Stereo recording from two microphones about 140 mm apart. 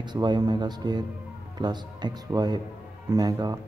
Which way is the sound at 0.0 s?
30° right (ahead or behind).